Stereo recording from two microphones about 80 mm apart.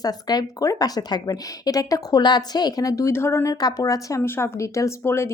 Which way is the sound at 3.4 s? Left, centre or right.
Left.